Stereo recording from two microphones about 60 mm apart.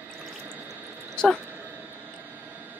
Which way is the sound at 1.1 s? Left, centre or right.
Centre.